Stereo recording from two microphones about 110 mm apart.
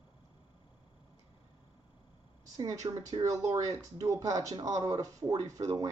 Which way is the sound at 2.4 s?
35° right (ahead or behind).